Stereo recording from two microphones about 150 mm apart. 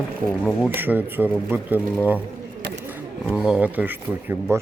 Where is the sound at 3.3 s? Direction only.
5° right (ahead or behind).